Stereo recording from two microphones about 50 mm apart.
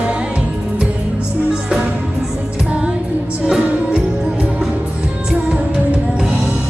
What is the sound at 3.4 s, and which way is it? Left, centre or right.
Music, centre.